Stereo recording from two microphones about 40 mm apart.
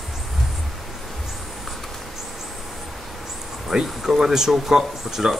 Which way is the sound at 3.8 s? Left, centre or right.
Centre.